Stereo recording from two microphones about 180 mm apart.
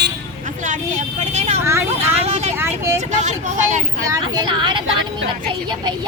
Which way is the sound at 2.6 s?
15° right (ahead or behind).